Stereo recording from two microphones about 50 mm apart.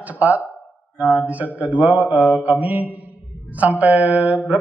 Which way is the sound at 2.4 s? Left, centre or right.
Right.